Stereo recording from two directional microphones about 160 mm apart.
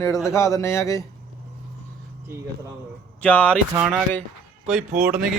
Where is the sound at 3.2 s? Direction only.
10° left (ahead or behind).